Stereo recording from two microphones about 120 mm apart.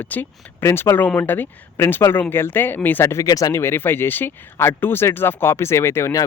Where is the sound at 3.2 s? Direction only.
30° left (ahead or behind).